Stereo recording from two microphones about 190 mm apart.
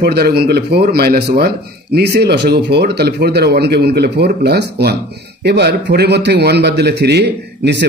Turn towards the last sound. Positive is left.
turn(degrees=-65)  # may be behind; listen again after turning